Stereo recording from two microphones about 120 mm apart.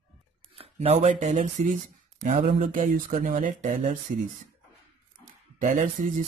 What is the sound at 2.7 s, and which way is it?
Speech, 90° right.